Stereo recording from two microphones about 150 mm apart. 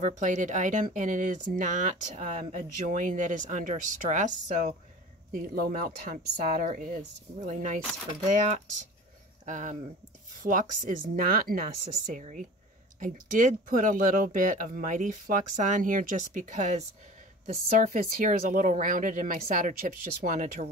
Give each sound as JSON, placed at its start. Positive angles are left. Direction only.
{"t": 0.0, "sound": "speech", "side_deg": -55}
{"t": 5.3, "sound": "speech", "side_deg": -70}
{"t": 9.5, "sound": "speech", "side_deg": -55}
{"t": 12.2, "sound": "speech", "side_deg": -55}